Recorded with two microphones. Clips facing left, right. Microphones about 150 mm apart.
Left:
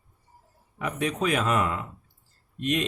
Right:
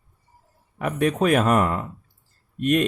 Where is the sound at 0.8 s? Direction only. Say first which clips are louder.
Right 6 dB; 50° right (ahead or behind).